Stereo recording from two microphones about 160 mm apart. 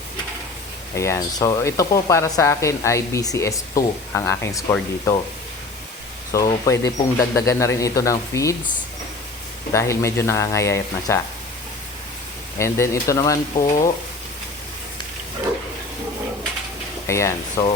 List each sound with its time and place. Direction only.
0.9 s speech: 20° left (ahead or behind)
6.3 s speech: 20° left (ahead or behind)
9.7 s speech: 15° left (ahead or behind)
12.5 s speech: 15° left (ahead or behind)
17.1 s speech: 20° left (ahead or behind)